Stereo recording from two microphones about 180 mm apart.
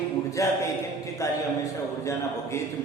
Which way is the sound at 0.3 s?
15° left (ahead or behind).